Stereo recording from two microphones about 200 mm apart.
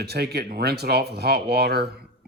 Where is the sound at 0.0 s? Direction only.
55° right (ahead or behind).